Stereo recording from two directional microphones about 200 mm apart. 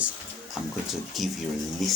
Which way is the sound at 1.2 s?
Centre (ahead or behind).